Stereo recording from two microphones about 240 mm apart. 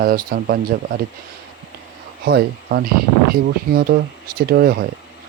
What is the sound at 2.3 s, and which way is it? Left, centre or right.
Speech, right.